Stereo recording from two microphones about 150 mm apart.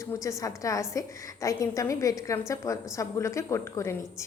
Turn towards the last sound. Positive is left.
turn(degrees=20)  # may be behind; listen again after turning